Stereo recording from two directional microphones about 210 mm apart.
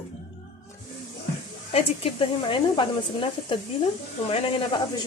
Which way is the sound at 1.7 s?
25° left (ahead or behind).